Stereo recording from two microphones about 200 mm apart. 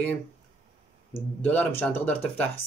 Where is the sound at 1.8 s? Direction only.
10° left (ahead or behind).